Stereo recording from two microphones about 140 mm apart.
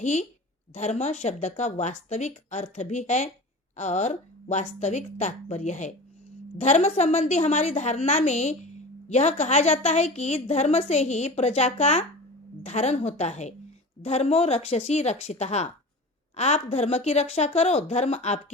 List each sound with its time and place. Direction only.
0.0 s a woman's voice: 55° left (ahead or behind)